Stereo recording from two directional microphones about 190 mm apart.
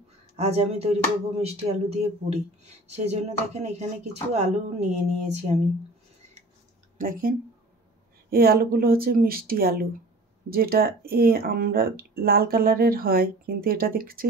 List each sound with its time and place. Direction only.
0.4 s speech: 35° right (ahead or behind)
7.0 s speech: 50° right (ahead or behind)